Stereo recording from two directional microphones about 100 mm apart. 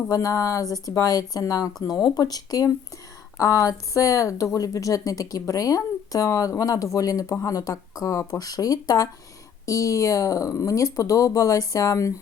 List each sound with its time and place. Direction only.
0.1 s speech: 35° left (ahead or behind)